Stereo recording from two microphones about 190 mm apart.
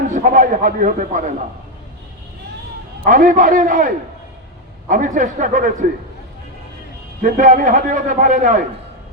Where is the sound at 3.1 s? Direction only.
45° right (ahead or behind).